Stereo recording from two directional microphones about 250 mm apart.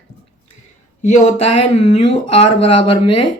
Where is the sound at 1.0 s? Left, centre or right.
Left.